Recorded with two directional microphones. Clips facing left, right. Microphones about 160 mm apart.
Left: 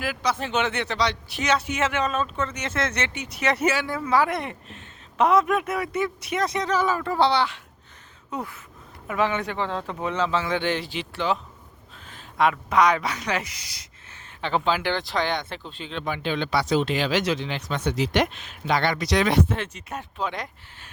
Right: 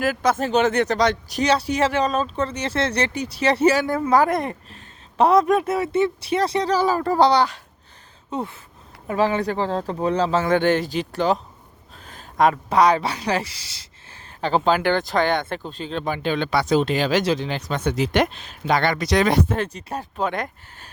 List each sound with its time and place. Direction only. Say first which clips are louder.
0.0 s a woman's voice: right 6 dB; 50° right (ahead or behind)
8.3 s a sound: right 4 dB; 30° right (ahead or behind)
9.0 s a woman's voice: right 4 dB; 35° right (ahead or behind); by 18.3 s 50° right (ahead or behind)
18.3 s a woman's voice: right 2 dB; 35° right (ahead or behind)
18.7 s speech: right 3 dB; 50° right (ahead or behind)
20.2 s speech: right 5 dB; 55° right (ahead or behind)